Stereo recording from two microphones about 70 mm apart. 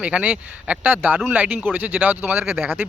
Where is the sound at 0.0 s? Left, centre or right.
Centre.